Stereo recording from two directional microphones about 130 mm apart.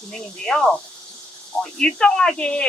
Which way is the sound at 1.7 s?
5° left (ahead or behind).